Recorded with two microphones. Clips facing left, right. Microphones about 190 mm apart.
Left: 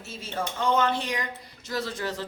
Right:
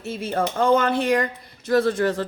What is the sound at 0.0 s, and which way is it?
A woman's voice, 55° right (ahead or behind).